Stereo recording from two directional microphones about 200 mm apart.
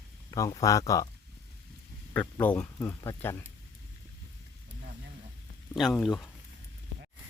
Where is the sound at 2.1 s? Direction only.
5° left (ahead or behind).